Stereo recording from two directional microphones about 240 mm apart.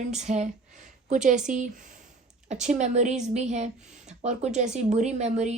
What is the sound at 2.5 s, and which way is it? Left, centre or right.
A woman's voice, right.